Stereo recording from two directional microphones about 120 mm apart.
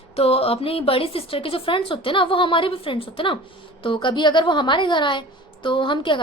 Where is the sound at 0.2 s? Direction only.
55° left (ahead or behind).